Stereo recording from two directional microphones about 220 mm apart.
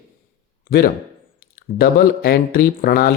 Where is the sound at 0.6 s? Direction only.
40° left (ahead or behind).